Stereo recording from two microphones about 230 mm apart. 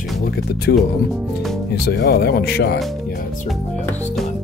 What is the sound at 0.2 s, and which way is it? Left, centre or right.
Speech, left.